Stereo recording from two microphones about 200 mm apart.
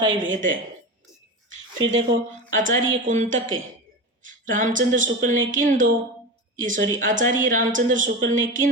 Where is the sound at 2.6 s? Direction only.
40° right (ahead or behind).